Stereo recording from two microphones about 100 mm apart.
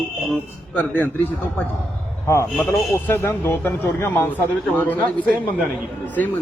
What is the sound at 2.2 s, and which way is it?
A man's voice, 30° left (ahead or behind).